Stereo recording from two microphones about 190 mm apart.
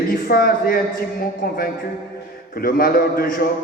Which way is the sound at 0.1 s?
50° left (ahead or behind).